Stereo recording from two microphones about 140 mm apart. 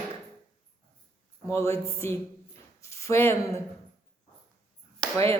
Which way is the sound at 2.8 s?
20° left (ahead or behind).